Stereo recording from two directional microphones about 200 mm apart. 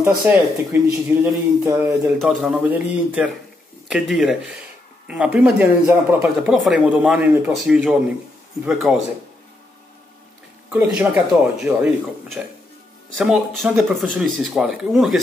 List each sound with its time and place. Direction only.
0.2 s speech: 10° right (ahead or behind)
2.1 s speech: 5° right (ahead or behind)
10.7 s speech: 5° right (ahead or behind)